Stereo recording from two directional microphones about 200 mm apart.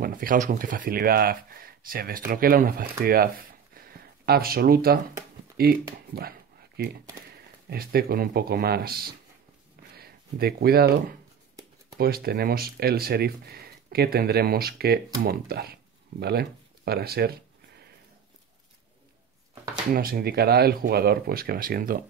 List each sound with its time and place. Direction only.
0.0 s speech: 45° right (ahead or behind)
19.9 s speech: 45° right (ahead or behind)